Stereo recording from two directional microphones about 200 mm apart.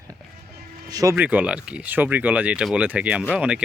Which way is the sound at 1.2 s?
5° right (ahead or behind).